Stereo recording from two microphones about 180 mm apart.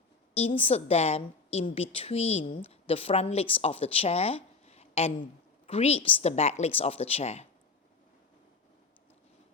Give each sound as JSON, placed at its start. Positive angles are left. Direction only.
{"t": 0.3, "sound": "a woman's voice", "side_deg": 30}